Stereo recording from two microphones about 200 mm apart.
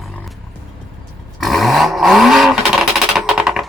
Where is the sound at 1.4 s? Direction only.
Centre (ahead or behind).